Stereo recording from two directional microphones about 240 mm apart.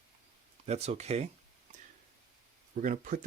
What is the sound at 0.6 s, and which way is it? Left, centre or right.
Speech, right.